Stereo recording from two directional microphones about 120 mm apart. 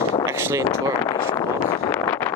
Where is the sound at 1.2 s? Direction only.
40° left (ahead or behind).